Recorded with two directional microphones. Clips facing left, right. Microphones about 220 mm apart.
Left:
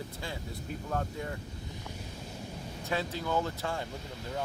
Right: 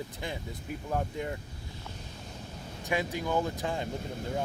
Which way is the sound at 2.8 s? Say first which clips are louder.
Right 2 dB; 15° right (ahead or behind).